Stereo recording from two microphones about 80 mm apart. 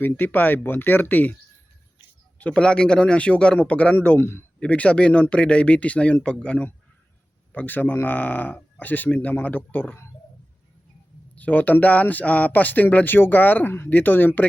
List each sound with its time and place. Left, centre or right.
0.0 s speech: left
2.4 s speech: centre; by 4.4 s left
4.6 s speech: centre
11.3 s speech: left